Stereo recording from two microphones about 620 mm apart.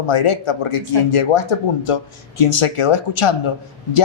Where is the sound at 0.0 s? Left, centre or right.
Left.